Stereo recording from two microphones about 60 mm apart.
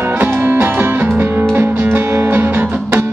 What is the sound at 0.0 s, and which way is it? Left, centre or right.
Music, right.